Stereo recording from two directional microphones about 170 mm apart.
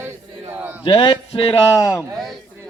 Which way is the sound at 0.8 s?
30° left (ahead or behind).